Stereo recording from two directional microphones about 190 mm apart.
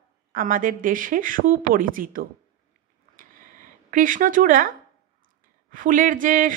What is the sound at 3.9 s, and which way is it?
Speech, 45° right (ahead or behind).